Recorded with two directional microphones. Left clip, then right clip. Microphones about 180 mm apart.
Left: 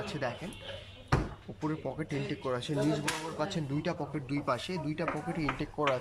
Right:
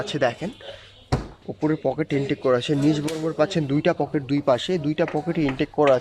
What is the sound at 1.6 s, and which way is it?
Speech, 45° right (ahead or behind).